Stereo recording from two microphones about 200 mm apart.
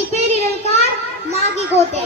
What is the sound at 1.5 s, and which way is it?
Speech, 35° left (ahead or behind).